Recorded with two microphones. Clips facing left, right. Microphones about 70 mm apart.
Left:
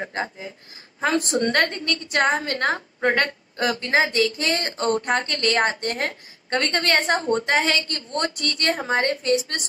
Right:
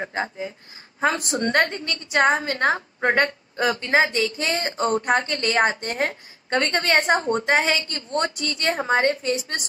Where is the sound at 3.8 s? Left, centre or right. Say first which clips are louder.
Left 1 dB; centre.